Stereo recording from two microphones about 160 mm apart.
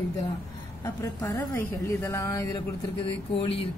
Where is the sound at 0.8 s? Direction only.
20° left (ahead or behind).